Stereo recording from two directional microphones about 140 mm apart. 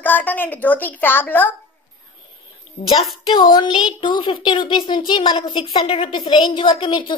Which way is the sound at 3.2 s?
30° left (ahead or behind).